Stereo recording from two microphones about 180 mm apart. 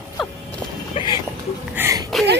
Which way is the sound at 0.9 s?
25° left (ahead or behind).